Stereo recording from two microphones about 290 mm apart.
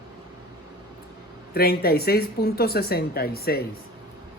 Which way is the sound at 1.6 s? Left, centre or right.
Left.